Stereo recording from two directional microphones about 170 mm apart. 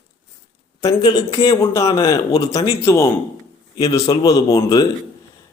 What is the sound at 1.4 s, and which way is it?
A man's voice, 15° left (ahead or behind).